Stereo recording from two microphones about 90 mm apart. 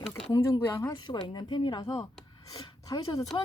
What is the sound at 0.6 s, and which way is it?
Speech, 25° left (ahead or behind).